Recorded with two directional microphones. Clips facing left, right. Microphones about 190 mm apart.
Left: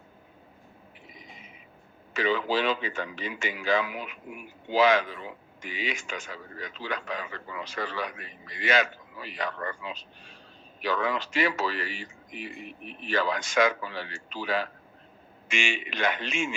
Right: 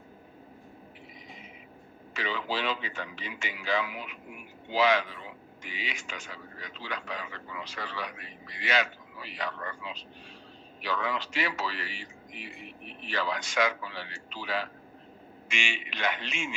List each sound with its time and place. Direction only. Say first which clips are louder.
2.1 s a man's voice: left 7 dB; 50° left (ahead or behind)